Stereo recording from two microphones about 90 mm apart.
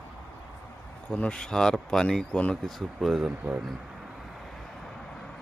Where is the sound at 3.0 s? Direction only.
5° right (ahead or behind).